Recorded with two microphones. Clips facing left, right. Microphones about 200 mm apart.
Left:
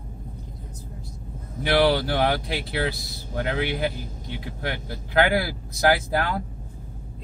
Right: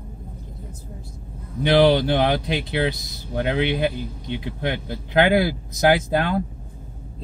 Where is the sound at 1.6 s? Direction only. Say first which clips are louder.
Right 4 dB; 25° right (ahead or behind).